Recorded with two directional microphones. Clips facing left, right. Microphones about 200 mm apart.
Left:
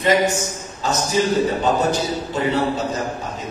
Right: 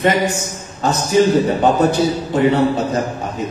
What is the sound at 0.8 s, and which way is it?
A man's voice, 55° right (ahead or behind).